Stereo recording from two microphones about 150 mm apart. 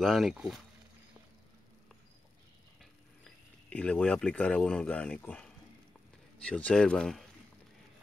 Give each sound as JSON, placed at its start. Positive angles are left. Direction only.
{"t": 0.0, "sound": "speech", "side_deg": 0}
{"t": 3.7, "sound": "speech", "side_deg": 5}